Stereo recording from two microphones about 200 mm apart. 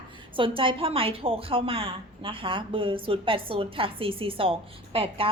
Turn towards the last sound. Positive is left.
turn(degrees=-25)  # may be behind; listen again after turning